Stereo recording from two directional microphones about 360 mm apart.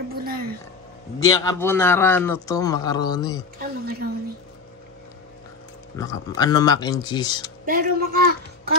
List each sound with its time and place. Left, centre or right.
0.1 s a sound: right
1.2 s a man's voice: centre
3.5 s speech: right
5.9 s a man's voice: centre
7.6 s speech: right